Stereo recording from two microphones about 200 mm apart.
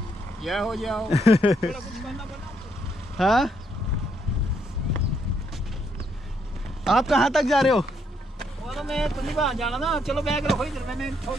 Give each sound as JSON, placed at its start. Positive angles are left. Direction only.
{"t": 0.4, "sound": "speech", "side_deg": 0}
{"t": 1.1, "sound": "speech", "side_deg": -15}
{"t": 1.7, "sound": "speech", "side_deg": 0}
{"t": 6.8, "sound": "speech", "side_deg": 0}